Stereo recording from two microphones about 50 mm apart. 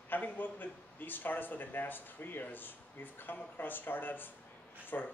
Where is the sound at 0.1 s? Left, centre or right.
Left.